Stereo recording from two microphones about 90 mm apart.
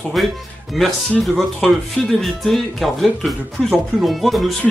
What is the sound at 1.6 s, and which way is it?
Speech, centre (ahead or behind).